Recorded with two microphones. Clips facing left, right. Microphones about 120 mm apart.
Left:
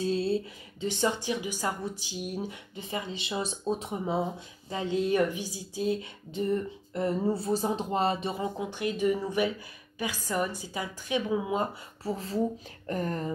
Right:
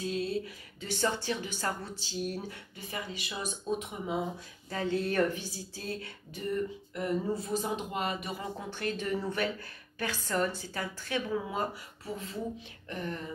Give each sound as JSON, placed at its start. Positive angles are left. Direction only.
{"t": 0.0, "sound": "speech", "side_deg": 30}
{"t": 4.6, "sound": "speech", "side_deg": 20}
{"t": 8.5, "sound": "speech", "side_deg": 15}
{"t": 12.0, "sound": "speech", "side_deg": 30}